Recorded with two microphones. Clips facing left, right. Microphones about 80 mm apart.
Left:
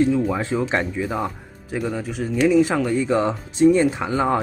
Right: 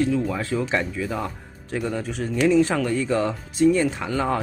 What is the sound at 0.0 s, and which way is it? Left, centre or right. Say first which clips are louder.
Speech: left 3 dB; left.